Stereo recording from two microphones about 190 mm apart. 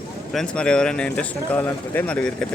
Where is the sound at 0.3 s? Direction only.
5° left (ahead or behind).